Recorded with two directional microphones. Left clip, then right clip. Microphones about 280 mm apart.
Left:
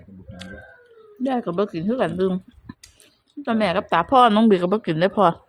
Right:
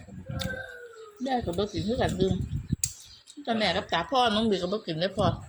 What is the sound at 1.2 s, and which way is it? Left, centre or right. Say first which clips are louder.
Speech: left 6 dB; left.